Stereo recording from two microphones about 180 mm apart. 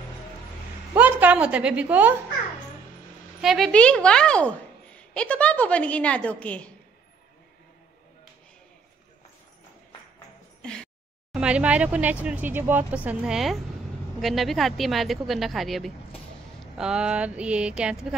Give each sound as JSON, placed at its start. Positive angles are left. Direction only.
{"t": 0.9, "sound": "a woman's voice", "side_deg": -10}
{"t": 3.3, "sound": "a woman's voice", "side_deg": 0}
{"t": 10.6, "sound": "a sound", "side_deg": 5}
{"t": 11.3, "sound": "speech", "side_deg": -5}